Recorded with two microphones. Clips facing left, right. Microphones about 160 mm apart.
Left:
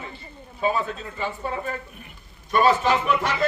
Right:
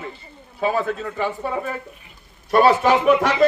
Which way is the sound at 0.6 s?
60° right (ahead or behind).